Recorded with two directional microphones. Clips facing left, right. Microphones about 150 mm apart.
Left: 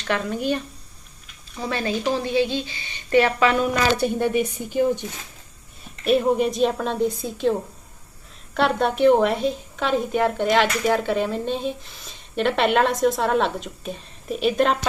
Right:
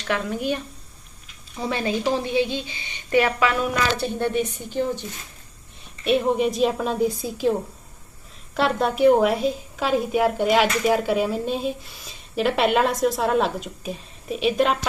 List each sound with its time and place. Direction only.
0.0 s speech: 10° right (ahead or behind)
1.7 s speech: 15° right (ahead or behind)
3.2 s a woman's voice: 5° right (ahead or behind)
3.9 s speech: 10° left (ahead or behind)
6.1 s a woman's voice: centre (ahead or behind)
8.5 s a woman's voice: centre (ahead or behind)